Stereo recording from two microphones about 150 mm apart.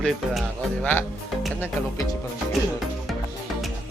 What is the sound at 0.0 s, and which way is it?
Speech, centre (ahead or behind).